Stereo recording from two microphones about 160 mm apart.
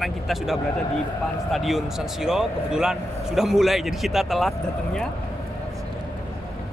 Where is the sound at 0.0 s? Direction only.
Centre (ahead or behind).